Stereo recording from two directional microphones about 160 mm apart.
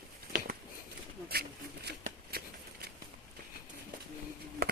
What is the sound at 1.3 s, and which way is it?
Shuffling cards, 85° right.